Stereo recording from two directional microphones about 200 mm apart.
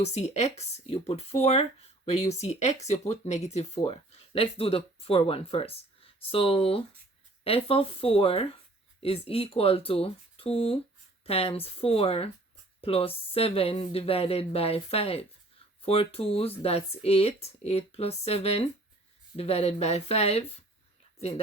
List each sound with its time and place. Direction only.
0.0 s speech: 35° left (ahead or behind)